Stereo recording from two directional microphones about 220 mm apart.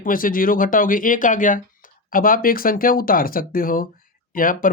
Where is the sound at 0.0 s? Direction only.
40° left (ahead or behind).